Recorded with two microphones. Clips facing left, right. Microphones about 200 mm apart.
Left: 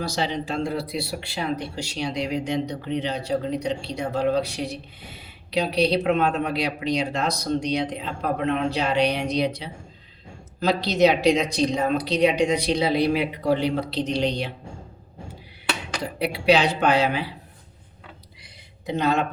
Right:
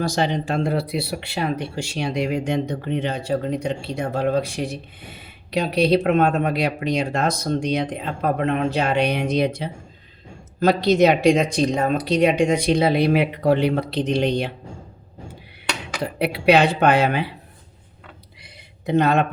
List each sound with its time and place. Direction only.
0.0 s speech: 50° right (ahead or behind)
16.1 s speech: 60° right (ahead or behind)
18.4 s a sound: 55° right (ahead or behind)